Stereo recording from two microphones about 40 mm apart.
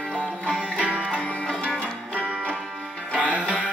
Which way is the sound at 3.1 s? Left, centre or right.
Left.